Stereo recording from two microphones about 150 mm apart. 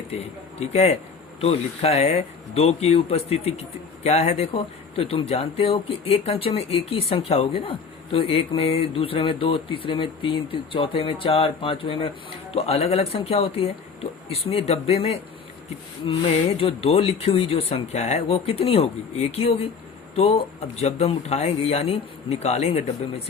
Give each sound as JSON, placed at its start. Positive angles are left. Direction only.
{"t": 0.6, "sound": "speech", "side_deg": 45}